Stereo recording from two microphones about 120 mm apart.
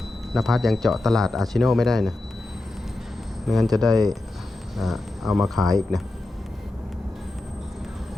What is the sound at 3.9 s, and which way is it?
Speech, 30° right (ahead or behind).